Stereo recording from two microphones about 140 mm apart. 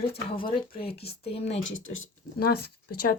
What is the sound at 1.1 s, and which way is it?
Speech, 45° left (ahead or behind).